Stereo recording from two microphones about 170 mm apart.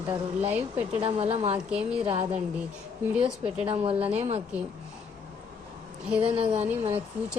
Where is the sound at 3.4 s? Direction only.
35° right (ahead or behind).